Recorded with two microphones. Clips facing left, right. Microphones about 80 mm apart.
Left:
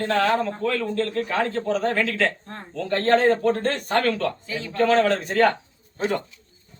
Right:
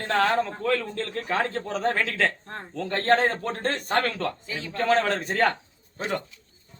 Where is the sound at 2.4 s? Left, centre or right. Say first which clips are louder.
Left 1 dB; centre.